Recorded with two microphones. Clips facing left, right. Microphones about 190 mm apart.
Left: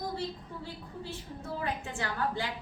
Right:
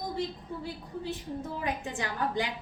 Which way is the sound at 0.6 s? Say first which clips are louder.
Right 5 dB; 15° right (ahead or behind).